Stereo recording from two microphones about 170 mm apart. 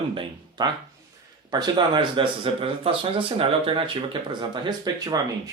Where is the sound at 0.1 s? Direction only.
25° right (ahead or behind).